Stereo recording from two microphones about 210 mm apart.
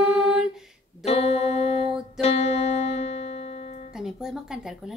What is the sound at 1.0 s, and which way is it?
Music, 30° left (ahead or behind).